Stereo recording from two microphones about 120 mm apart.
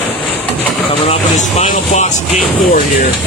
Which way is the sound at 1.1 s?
70° left (ahead or behind).